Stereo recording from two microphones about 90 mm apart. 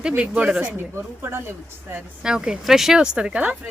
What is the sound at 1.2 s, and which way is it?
Speech, 25° right (ahead or behind).